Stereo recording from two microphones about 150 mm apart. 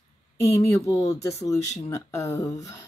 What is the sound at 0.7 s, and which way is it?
Speech, 20° left (ahead or behind).